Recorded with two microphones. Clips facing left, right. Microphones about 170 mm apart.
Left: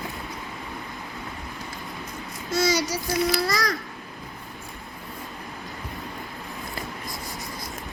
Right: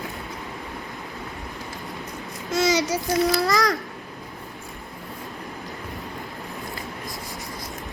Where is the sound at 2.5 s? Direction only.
20° right (ahead or behind).